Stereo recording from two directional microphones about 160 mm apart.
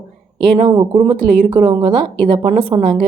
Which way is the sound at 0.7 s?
30° right (ahead or behind).